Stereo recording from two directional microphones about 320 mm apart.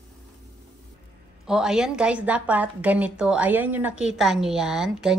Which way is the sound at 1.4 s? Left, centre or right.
Centre.